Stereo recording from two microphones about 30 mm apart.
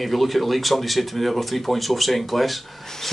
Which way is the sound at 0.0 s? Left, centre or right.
Centre.